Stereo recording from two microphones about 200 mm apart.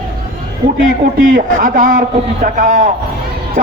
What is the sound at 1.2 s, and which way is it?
Speech, 40° right (ahead or behind).